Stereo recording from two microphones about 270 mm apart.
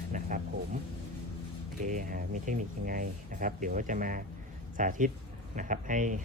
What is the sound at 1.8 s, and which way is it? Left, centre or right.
Speech, right.